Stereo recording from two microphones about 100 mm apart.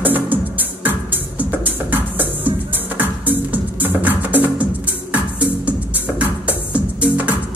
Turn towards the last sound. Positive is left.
turn(degrees=-15)  # may be behind; listen again after turning